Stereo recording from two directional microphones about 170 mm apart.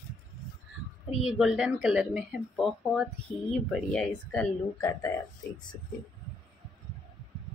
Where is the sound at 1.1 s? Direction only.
5° right (ahead or behind).